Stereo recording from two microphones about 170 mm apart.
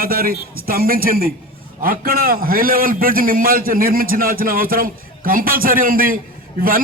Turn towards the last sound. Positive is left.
turn(degrees=-55)  # may be behind; listen again after turning